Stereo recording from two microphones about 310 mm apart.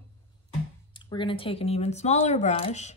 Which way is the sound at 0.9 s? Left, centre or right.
Centre.